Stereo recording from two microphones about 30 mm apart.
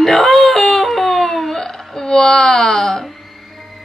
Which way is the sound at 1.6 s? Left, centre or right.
Centre.